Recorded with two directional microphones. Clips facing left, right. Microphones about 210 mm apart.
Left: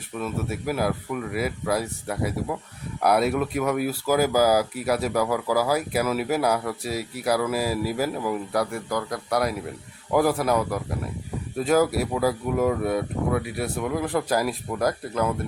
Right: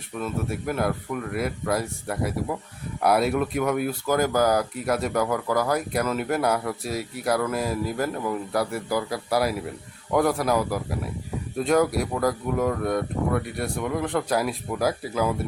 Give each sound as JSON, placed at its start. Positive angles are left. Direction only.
{"t": 0.1, "sound": "speech", "side_deg": 5}